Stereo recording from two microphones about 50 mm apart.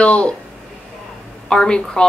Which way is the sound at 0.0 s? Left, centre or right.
Left.